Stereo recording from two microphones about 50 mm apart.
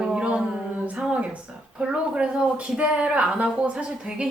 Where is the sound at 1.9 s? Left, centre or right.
Centre.